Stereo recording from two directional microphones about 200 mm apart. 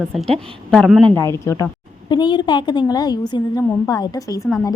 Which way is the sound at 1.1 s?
15° left (ahead or behind).